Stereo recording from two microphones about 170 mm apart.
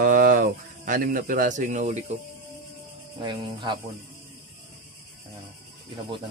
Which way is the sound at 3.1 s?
25° right (ahead or behind).